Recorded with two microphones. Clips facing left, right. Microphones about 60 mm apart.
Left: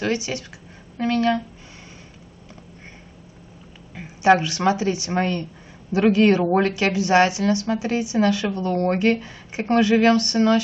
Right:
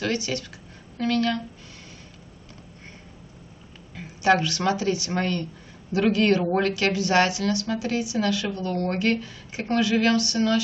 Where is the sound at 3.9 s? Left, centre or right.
Left.